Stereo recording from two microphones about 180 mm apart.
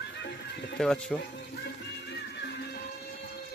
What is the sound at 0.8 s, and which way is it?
Speech, 5° left (ahead or behind).